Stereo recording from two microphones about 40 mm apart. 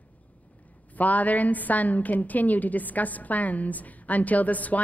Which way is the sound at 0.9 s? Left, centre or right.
Left.